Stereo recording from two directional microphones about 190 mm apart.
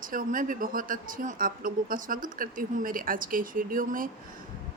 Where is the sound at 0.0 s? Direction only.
45° right (ahead or behind).